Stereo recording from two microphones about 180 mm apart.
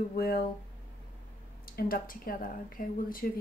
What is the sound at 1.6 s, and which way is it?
Speech, 55° left (ahead or behind).